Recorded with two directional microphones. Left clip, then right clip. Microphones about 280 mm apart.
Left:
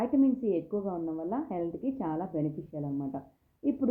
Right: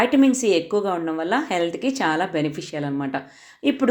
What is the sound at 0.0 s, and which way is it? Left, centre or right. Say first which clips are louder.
A woman's voice: right 10 dB; right.